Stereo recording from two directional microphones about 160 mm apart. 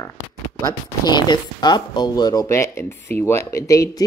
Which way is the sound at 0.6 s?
25° left (ahead or behind).